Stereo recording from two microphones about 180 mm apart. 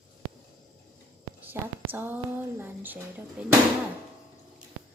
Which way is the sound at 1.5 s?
10° right (ahead or behind).